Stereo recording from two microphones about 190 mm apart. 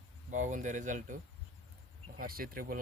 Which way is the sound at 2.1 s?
50° right (ahead or behind).